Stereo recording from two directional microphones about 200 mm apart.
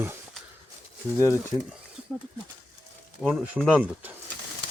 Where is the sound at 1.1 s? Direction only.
15° left (ahead or behind).